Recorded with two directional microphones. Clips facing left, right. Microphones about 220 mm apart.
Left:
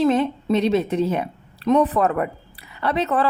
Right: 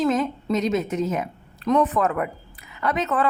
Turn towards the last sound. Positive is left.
turn(degrees=35)  # may be behind; listen again after turning